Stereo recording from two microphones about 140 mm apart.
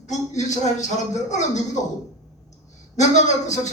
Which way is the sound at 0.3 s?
55° left (ahead or behind).